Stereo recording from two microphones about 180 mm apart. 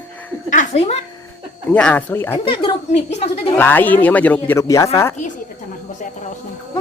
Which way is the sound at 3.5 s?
10° left (ahead or behind).